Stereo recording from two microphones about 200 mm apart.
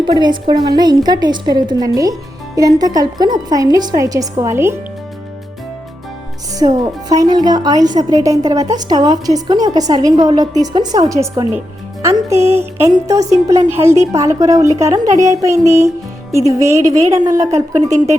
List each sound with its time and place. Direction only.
0.0 s a woman's voice: 20° right (ahead or behind)
7.2 s a woman's voice: 20° right (ahead or behind)